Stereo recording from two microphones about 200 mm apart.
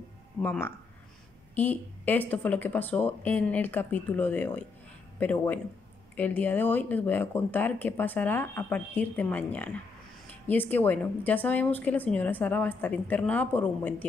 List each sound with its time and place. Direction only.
0.4 s speech: 10° left (ahead or behind)